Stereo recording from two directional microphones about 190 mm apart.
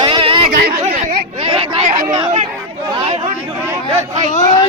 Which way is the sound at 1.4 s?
30° right (ahead or behind).